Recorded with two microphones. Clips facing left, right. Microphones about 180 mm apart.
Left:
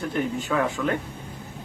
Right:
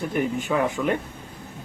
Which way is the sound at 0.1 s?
15° right (ahead or behind).